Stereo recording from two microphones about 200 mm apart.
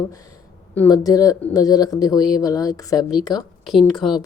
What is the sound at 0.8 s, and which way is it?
Speech, 20° left (ahead or behind).